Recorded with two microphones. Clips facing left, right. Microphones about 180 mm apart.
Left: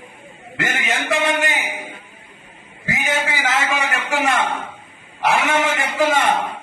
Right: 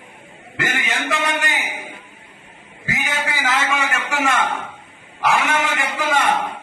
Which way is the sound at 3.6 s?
35° left (ahead or behind).